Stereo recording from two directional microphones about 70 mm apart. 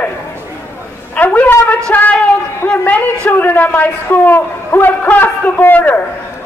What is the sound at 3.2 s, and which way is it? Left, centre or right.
A man's voice, left.